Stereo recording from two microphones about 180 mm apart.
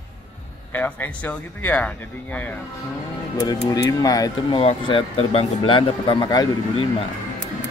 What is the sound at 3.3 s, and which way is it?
Speech, 20° left (ahead or behind).